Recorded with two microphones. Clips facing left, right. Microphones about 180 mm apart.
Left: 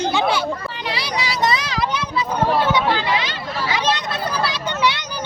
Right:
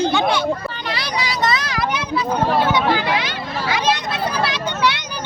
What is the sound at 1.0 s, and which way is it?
Vehicle, 10° left (ahead or behind).